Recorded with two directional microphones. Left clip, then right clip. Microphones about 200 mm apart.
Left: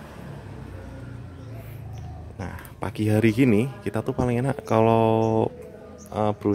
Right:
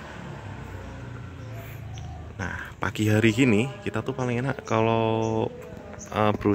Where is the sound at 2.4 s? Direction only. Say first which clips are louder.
Right 4 dB; 10° left (ahead or behind); by 5.5 s 25° left (ahead or behind).